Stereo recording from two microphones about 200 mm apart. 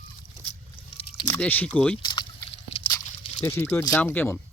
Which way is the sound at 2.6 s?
30° left (ahead or behind).